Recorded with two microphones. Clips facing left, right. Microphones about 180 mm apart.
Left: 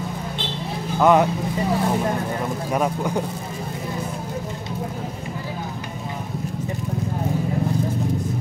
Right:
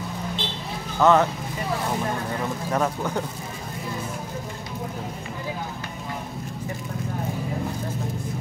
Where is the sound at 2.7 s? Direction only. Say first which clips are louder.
Left 2 dB; 10° left (ahead or behind).